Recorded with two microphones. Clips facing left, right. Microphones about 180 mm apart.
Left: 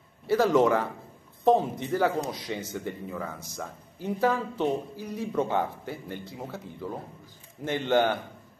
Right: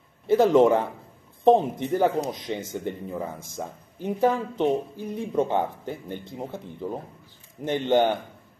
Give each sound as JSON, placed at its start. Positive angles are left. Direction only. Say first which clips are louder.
{"t": 0.3, "sound": "speech", "louder": "right 4 dB", "side_deg": -20}